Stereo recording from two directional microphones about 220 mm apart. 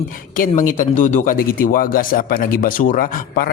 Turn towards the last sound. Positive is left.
turn(degrees=40)  # may be behind; listen again after turning